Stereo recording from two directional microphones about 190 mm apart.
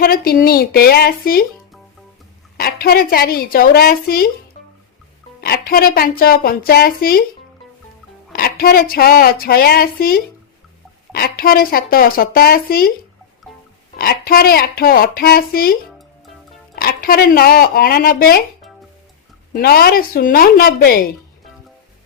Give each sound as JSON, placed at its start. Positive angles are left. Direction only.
{"t": 0.0, "sound": "speech", "side_deg": 50}
{"t": 2.6, "sound": "speech", "side_deg": 50}
{"t": 5.4, "sound": "speech", "side_deg": 50}
{"t": 8.3, "sound": "speech", "side_deg": 55}
{"t": 14.0, "sound": "speech", "side_deg": 50}
{"t": 19.5, "sound": "speech", "side_deg": 55}